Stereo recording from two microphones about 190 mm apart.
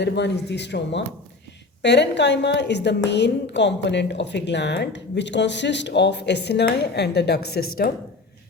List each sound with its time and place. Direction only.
0.0 s a woman's voice: 65° left (ahead or behind)